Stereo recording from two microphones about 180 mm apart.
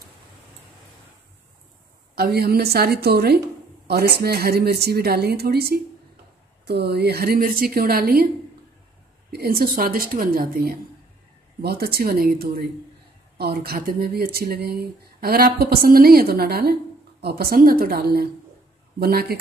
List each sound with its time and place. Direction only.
2.1 s speech: 60° right (ahead or behind)
9.3 s speech: 55° right (ahead or behind)